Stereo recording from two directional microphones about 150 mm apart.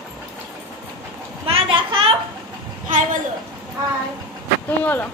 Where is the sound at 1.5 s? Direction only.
35° right (ahead or behind).